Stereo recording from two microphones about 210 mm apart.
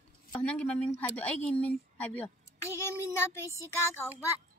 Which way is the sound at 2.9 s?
15° left (ahead or behind).